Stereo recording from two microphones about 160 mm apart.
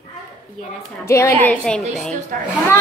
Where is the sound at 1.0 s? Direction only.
15° left (ahead or behind).